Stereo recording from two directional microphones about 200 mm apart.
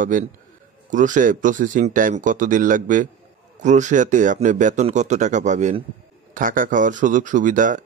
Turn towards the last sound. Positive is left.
turn(degrees=-40)  # may be behind; listen again after turning